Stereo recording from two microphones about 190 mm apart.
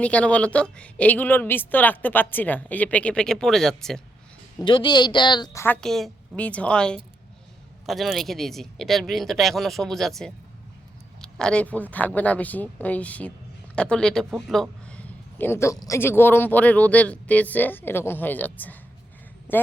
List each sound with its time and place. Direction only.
0.0 s a man's voice: 5° left (ahead or behind)
4.6 s speech: 25° left (ahead or behind)
5.6 s a man's voice: 5° left (ahead or behind)